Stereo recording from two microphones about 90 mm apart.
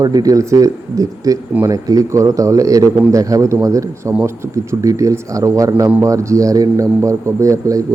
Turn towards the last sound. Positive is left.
turn(degrees=-35)  # may be behind; listen again after turning